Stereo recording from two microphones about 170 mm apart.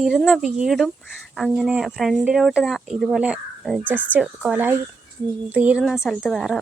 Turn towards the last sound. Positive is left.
turn(degrees=0)  # may be behind; listen again after turning